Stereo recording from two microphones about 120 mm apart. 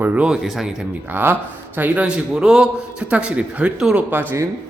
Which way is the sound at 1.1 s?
15° right (ahead or behind).